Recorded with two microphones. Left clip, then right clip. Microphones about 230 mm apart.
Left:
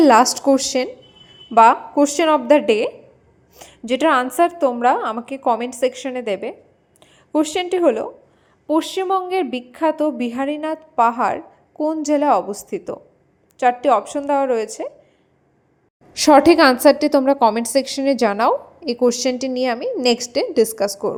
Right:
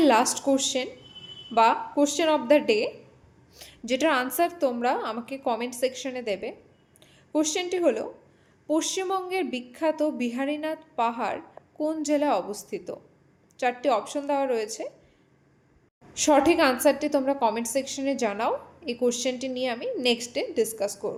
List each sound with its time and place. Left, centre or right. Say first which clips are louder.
0.0 s a woman's voice: left 9 dB; left
16.1 s a woman's voice: left 9 dB; left